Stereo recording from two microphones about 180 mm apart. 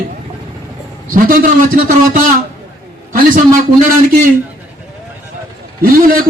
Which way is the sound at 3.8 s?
50° right (ahead or behind).